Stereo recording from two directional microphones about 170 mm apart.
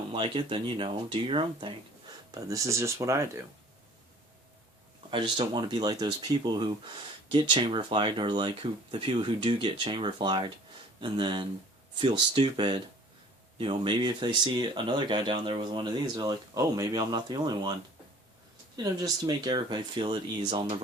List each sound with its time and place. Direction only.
0.1 s speech: 30° right (ahead or behind)
2.3 s speech: 20° right (ahead or behind)
5.1 s speech: 25° right (ahead or behind)
18.8 s speech: 20° right (ahead or behind)